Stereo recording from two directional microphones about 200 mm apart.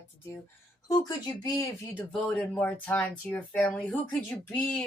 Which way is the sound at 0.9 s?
20° left (ahead or behind).